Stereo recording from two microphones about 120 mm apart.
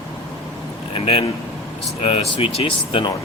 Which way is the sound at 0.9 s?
55° left (ahead or behind).